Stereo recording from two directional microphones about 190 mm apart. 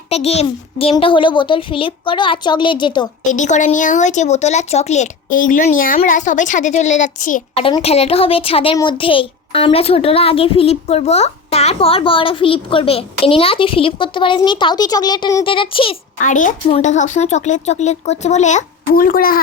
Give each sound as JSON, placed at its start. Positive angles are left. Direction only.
{"t": 0.1, "sound": "a child's voice", "side_deg": 35}
{"t": 3.2, "sound": "a woman's voice", "side_deg": 40}
{"t": 7.6, "sound": "a child's voice", "side_deg": 30}
{"t": 16.2, "sound": "a woman's voice", "side_deg": 45}